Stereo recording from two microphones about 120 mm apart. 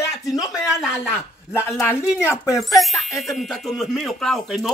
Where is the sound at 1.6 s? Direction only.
20° left (ahead or behind).